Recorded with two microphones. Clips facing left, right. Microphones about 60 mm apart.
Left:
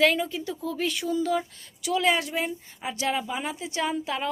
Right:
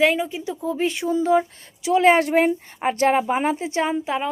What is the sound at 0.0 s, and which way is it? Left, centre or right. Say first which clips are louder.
A woman's voice: right 3 dB; centre.